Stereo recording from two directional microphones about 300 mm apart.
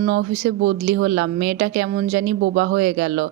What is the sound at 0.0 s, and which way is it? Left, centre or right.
A woman's voice, right.